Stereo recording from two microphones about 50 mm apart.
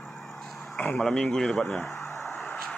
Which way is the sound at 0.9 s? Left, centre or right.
Centre.